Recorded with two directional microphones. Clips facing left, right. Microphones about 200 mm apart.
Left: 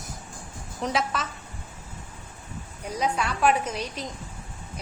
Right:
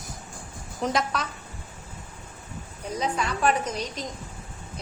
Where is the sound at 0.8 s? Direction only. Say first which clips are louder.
Right 1 dB; centre (ahead or behind).